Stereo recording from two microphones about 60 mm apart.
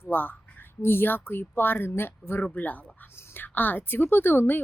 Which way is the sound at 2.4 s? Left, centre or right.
Left.